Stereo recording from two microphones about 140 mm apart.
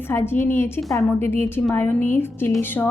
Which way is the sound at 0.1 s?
15° left (ahead or behind).